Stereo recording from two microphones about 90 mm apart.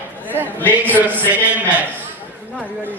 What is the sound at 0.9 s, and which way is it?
Speech, 20° right (ahead or behind).